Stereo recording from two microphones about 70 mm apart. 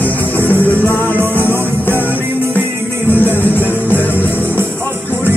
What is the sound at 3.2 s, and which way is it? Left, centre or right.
Music, left.